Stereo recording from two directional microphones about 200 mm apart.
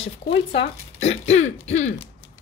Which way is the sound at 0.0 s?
30° left (ahead or behind).